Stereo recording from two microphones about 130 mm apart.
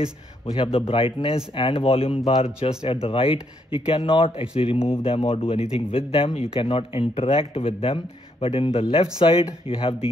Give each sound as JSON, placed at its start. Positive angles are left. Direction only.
{"t": 0.6, "sound": "speech", "side_deg": 45}